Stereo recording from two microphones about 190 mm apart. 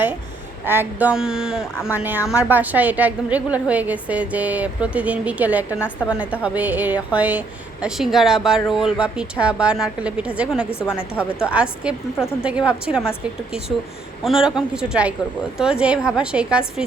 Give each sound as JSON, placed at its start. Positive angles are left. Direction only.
{"t": 0.6, "sound": "a woman's voice", "side_deg": -10}
{"t": 10.7, "sound": "a woman's voice", "side_deg": 10}
{"t": 11.4, "sound": "a woman's voice", "side_deg": -5}